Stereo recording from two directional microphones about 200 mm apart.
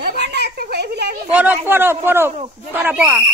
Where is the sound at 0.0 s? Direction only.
55° right (ahead or behind).